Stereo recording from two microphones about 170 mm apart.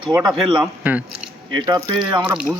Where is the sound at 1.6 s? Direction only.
25° right (ahead or behind).